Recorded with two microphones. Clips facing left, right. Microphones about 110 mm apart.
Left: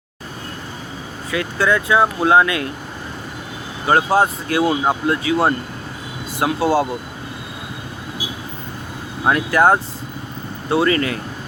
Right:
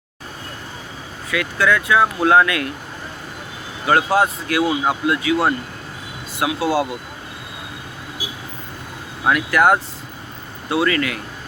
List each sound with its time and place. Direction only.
1.3 s speech: 30° left (ahead or behind)
3.8 s speech: 30° left (ahead or behind)
9.3 s speech: 30° left (ahead or behind)